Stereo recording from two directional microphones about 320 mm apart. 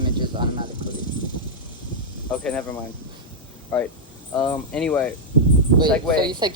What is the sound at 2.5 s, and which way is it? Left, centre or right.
Speech, centre.